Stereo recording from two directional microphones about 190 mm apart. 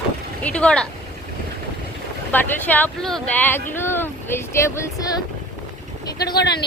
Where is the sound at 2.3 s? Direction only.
10° left (ahead or behind).